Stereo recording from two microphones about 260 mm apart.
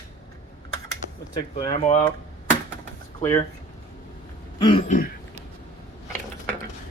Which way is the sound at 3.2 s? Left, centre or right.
Centre.